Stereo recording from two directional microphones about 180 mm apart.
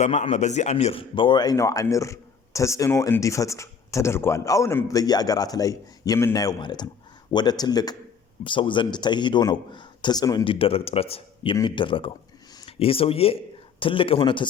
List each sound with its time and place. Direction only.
0.0 s speech: 40° left (ahead or behind)